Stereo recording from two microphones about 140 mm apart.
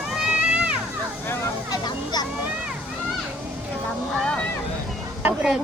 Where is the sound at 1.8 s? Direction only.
30° left (ahead or behind).